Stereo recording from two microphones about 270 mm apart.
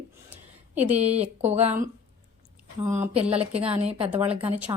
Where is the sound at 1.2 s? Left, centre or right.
Right.